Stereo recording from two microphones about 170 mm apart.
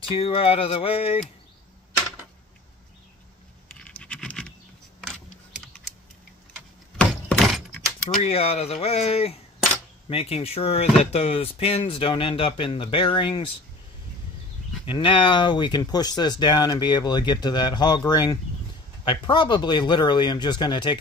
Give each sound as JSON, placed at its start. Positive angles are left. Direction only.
{"t": 0.1, "sound": "speech", "side_deg": 30}
{"t": 3.7, "sound": "scratch", "side_deg": 5}
{"t": 7.0, "sound": "a sound", "side_deg": 5}
{"t": 8.2, "sound": "speech", "side_deg": 35}
{"t": 14.9, "sound": "speech", "side_deg": 30}